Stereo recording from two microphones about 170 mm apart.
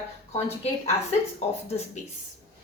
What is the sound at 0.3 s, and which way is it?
Speech, 35° left (ahead or behind).